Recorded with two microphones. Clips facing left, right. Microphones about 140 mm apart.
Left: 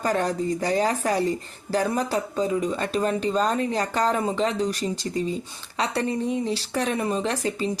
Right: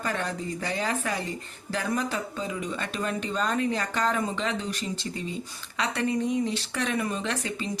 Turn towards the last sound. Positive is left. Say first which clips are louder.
# left 5 dB
turn(degrees=35)  # may be behind; listen again after turning